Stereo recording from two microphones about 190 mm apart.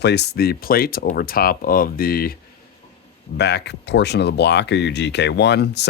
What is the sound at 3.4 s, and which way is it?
Speech, 60° left (ahead or behind).